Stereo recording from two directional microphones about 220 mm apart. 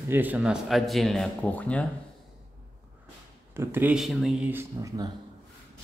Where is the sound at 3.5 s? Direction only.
10° right (ahead or behind).